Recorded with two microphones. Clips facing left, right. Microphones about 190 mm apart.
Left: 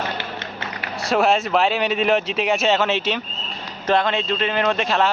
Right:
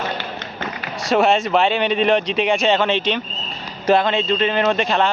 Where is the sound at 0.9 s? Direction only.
Centre (ahead or behind).